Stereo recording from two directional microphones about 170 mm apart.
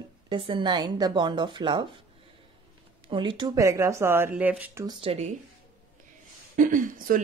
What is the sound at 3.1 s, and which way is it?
Speech, 30° right (ahead or behind).